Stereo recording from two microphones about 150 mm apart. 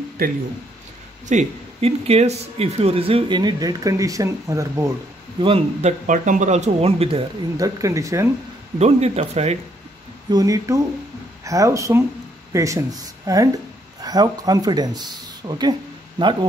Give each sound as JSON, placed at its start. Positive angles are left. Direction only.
{"t": 0.2, "sound": "speech", "side_deg": -75}
{"t": 1.3, "sound": "speech", "side_deg": -45}
{"t": 5.4, "sound": "speech", "side_deg": -45}
{"t": 7.5, "sound": "speech", "side_deg": -20}
{"t": 8.7, "sound": "speech", "side_deg": -45}
{"t": 10.3, "sound": "speech", "side_deg": -20}